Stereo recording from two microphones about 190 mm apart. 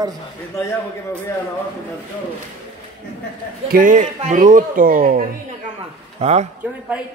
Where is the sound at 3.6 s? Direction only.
45° right (ahead or behind).